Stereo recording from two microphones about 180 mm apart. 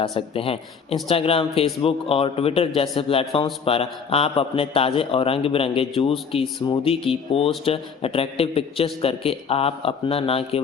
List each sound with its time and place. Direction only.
0.0 s a man's voice: 30° left (ahead or behind)